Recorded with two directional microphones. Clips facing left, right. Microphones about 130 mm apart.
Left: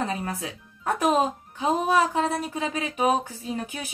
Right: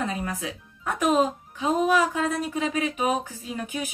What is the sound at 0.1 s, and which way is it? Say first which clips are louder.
Speech: even; 35° left (ahead or behind).